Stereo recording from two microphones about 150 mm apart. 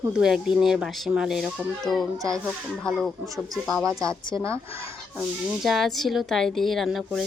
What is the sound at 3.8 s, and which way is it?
Speech, 20° right (ahead or behind).